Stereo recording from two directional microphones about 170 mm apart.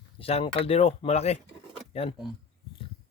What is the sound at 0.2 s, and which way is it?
Speech, 35° left (ahead or behind).